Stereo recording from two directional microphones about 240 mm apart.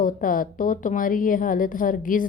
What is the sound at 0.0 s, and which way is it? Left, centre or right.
Speech, left.